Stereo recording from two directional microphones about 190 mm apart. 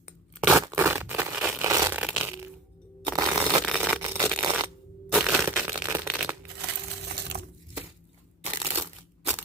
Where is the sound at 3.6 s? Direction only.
Centre (ahead or behind).